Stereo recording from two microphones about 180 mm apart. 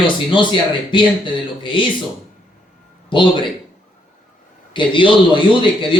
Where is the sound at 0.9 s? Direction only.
25° left (ahead or behind).